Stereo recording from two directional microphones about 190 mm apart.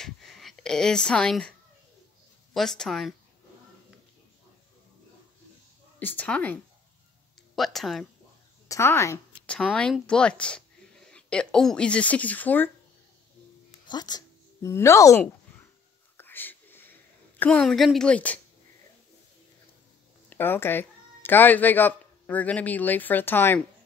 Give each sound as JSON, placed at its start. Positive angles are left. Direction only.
{"t": 0.0, "sound": "a sound", "side_deg": 0}
{"t": 2.5, "sound": "speech", "side_deg": 0}
{"t": 5.9, "sound": "a woman's voice", "side_deg": 10}
{"t": 8.6, "sound": "a sound", "side_deg": 15}
{"t": 9.6, "sound": "speech", "side_deg": 0}
{"t": 13.8, "sound": "speech", "side_deg": 20}
{"t": 16.2, "sound": "whispering", "side_deg": 10}
{"t": 20.2, "sound": "speech", "side_deg": 10}